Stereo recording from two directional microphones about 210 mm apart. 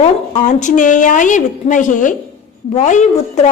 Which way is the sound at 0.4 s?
35° left (ahead or behind).